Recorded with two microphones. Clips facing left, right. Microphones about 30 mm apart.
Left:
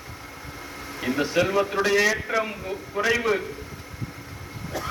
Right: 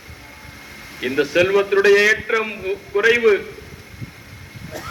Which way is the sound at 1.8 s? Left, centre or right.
Right.